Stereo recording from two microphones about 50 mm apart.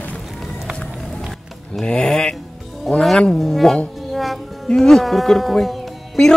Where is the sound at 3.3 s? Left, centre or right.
Centre.